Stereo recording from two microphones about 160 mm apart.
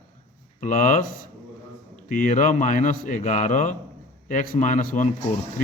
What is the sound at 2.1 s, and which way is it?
A man's voice, 55° left (ahead or behind).